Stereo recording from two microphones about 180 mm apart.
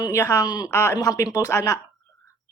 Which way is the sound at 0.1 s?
15° left (ahead or behind).